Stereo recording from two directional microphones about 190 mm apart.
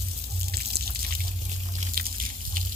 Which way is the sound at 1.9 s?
50° right (ahead or behind).